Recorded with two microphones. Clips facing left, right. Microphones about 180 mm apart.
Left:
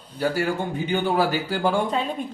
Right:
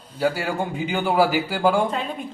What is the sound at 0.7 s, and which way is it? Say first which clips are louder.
Speech: right 3 dB; 10° right (ahead or behind).